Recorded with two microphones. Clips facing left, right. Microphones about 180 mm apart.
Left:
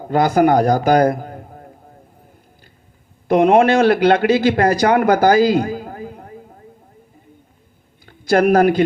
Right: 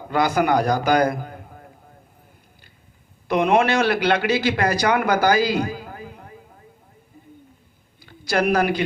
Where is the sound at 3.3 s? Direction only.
45° left (ahead or behind).